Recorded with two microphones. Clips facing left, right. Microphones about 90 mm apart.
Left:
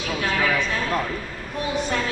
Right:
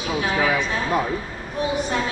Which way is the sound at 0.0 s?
15° right (ahead or behind).